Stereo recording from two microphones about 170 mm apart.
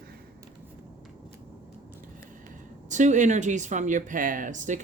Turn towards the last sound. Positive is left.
turn(degrees=-50)  # may be behind; listen again after turning